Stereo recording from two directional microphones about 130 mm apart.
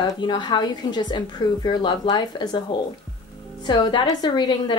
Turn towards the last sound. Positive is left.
turn(degrees=30)  # may be behind; listen again after turning